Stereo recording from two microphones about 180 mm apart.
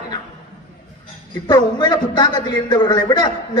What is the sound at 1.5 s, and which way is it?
A man's voice, 25° left (ahead or behind).